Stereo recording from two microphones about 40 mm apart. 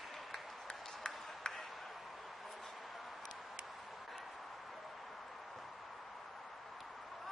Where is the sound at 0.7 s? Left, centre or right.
Centre.